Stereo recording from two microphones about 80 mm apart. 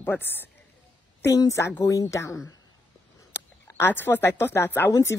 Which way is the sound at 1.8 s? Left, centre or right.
Left.